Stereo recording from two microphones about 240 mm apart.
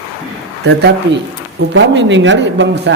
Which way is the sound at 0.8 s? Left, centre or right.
Right.